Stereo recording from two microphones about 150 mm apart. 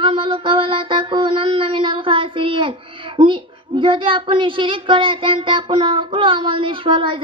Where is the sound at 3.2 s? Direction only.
35° right (ahead or behind).